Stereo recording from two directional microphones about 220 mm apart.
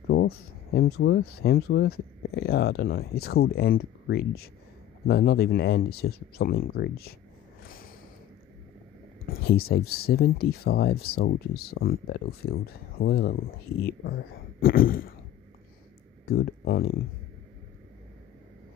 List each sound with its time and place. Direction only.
0.1 s speech: 45° left (ahead or behind)
9.2 s speech: 45° left (ahead or behind)
14.6 s a sound: 40° left (ahead or behind)
16.3 s speech: 45° left (ahead or behind)